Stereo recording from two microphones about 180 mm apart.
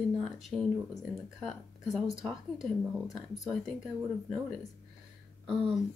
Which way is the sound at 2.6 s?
Centre (ahead or behind).